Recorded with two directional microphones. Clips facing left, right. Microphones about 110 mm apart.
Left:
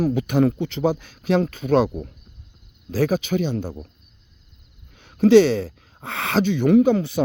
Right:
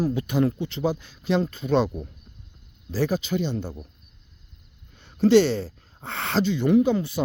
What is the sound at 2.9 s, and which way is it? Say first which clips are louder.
Speech: left 4 dB; 55° left (ahead or behind).